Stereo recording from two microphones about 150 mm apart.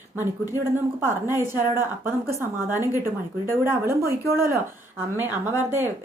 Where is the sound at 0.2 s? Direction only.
15° right (ahead or behind).